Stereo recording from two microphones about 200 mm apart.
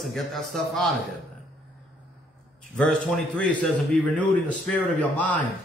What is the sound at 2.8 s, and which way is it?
A man's voice, 5° left (ahead or behind).